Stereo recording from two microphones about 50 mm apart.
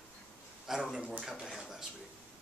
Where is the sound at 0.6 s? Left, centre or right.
Centre.